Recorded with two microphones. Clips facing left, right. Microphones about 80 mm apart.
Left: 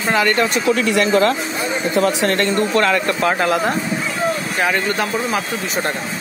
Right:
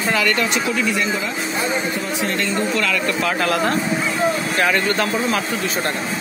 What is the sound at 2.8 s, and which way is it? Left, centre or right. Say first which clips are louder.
Speech: left 4 dB; left.